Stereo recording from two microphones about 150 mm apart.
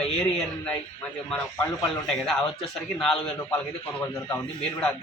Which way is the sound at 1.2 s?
5° left (ahead or behind).